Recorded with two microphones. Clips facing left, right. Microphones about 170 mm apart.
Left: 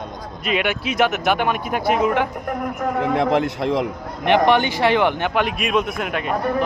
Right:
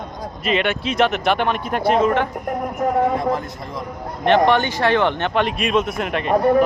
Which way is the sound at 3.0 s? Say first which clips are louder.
Left 4 dB; 75° left (ahead or behind).